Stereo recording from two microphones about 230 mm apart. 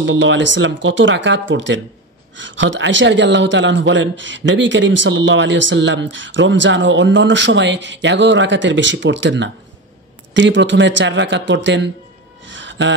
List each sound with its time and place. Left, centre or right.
0.0 s speech: right
12.4 s music: right